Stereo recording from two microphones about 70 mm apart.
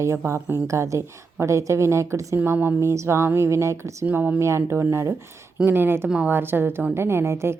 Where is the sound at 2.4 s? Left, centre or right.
Right.